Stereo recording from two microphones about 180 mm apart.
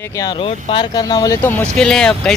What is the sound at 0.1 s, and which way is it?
Speech, 20° left (ahead or behind).